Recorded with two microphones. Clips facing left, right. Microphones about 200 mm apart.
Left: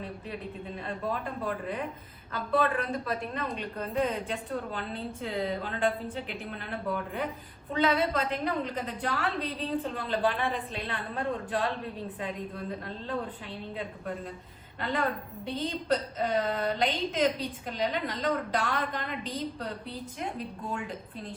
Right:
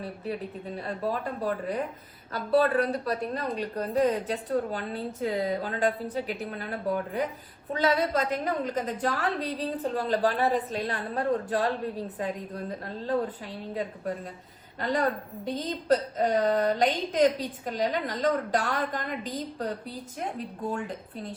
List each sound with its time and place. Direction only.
0.8 s a woman's voice: 40° right (ahead or behind)
14.8 s a woman's voice: 40° right (ahead or behind)